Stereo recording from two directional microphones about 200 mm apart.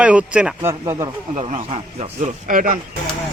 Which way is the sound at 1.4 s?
35° right (ahead or behind).